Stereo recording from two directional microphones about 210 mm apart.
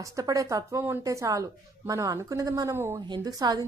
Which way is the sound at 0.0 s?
15° right (ahead or behind).